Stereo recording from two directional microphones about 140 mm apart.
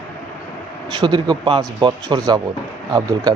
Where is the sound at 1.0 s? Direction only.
30° right (ahead or behind).